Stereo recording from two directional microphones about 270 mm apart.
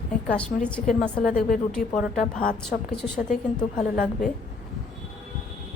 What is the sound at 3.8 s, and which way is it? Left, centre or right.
Speech, left.